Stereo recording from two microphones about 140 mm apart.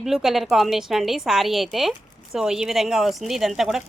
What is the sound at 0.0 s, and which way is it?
A woman's voice, centre (ahead or behind).